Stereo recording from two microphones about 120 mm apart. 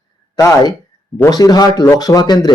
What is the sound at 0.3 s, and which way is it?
A man's voice, 30° left (ahead or behind).